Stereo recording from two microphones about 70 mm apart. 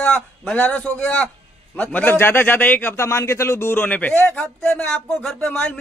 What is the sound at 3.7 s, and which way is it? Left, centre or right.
A man's voice, left.